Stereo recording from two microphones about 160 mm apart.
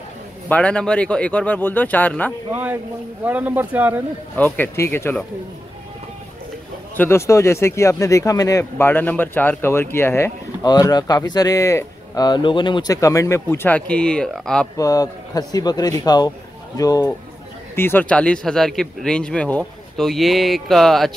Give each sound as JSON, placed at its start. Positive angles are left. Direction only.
{"t": 0.5, "sound": "speech", "side_deg": 5}
{"t": 2.5, "sound": "speech", "side_deg": -10}
{"t": 4.4, "sound": "speech", "side_deg": 15}
{"t": 7.0, "sound": "speech", "side_deg": 15}
{"t": 14.8, "sound": "a man's voice", "side_deg": 20}